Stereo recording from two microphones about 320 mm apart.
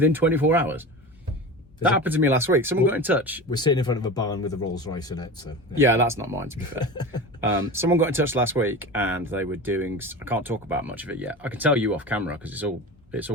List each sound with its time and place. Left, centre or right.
0.0 s speech: centre
3.5 s speech: centre
5.7 s speech: centre
6.9 s speech: centre
7.4 s speech: centre